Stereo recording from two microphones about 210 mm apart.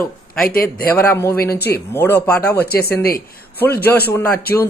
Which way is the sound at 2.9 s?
45° left (ahead or behind).